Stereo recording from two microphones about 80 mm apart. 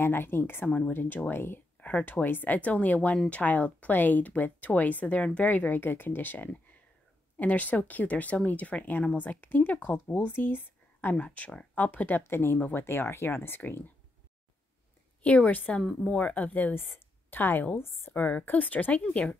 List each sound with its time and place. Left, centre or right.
0.0 s speech: left
15.2 s a woman's voice: centre; by 18.1 s left
18.1 s speech: centre